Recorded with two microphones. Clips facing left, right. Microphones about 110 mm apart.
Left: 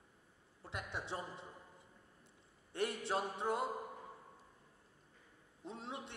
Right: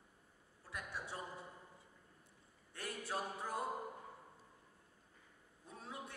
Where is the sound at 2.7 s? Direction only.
25° left (ahead or behind).